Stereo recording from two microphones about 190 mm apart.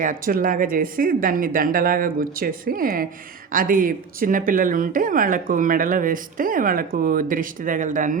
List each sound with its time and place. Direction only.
0.0 s speech: 45° right (ahead or behind)